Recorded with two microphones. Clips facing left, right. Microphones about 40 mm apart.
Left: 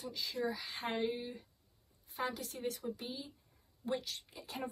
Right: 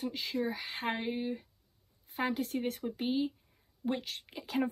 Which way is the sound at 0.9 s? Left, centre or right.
Right.